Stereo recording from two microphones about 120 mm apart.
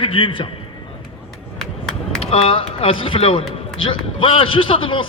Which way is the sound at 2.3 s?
50° left (ahead or behind).